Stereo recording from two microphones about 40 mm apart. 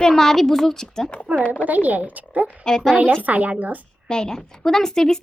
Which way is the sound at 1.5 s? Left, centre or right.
Right.